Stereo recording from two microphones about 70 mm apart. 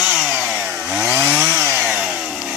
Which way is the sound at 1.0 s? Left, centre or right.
Right.